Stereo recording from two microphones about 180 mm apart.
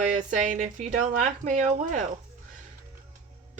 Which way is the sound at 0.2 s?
45° right (ahead or behind).